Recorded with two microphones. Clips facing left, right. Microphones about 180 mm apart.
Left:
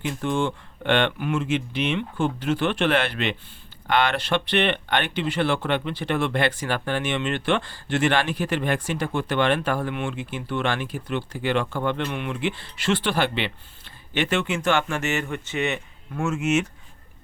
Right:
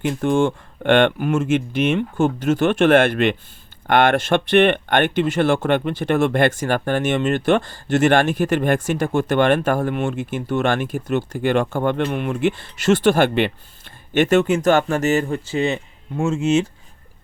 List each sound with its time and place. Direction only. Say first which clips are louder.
0.0 s speech: right 7 dB; 50° right (ahead or behind); by 16.6 s 30° right (ahead or behind)